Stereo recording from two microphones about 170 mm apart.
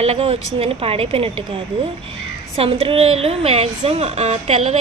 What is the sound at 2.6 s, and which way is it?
A woman's voice, 35° right (ahead or behind).